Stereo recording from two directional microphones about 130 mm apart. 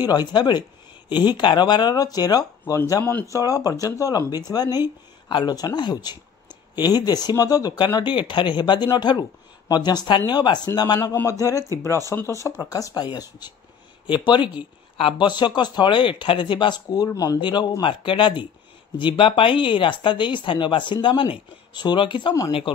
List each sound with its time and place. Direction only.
0.0 s speech: 35° left (ahead or behind)
11.0 s speech: 20° left (ahead or behind); by 22.3 s 40° left (ahead or behind)